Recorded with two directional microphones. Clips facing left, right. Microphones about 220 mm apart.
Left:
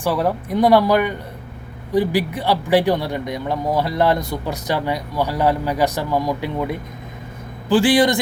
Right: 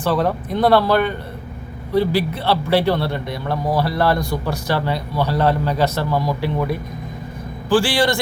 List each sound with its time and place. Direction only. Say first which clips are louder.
0.0 s a man's voice: right 1 dB; 10° left (ahead or behind)